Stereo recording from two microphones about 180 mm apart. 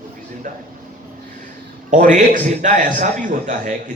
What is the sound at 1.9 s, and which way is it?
A man's voice, 45° right (ahead or behind).